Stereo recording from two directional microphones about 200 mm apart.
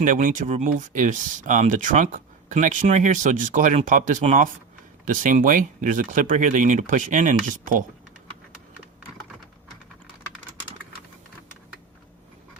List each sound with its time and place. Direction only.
0.0 s speech: 40° right (ahead or behind)